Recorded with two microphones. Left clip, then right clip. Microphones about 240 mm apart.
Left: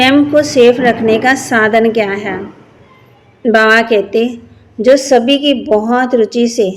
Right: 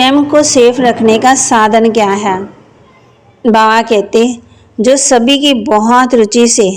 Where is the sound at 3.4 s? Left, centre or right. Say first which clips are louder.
Right 1 dB; right.